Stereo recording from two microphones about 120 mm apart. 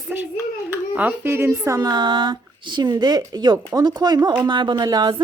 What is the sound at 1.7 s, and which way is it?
A woman's voice, 35° right (ahead or behind).